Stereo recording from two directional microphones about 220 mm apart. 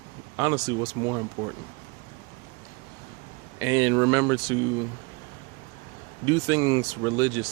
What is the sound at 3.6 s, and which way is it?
Speech, 15° right (ahead or behind).